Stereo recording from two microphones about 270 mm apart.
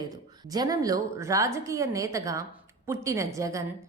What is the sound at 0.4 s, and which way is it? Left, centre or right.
A woman's voice, centre.